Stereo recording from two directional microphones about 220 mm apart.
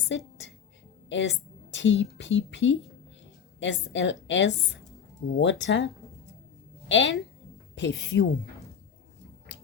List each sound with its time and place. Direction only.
0.1 s a woman's voice: 55° left (ahead or behind)
6.8 s a woman's voice: 55° left (ahead or behind)